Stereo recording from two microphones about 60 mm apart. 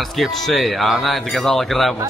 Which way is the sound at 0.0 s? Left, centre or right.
Centre.